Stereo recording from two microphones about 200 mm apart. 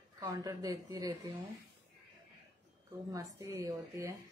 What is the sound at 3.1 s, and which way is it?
A woman's voice, 15° right (ahead or behind).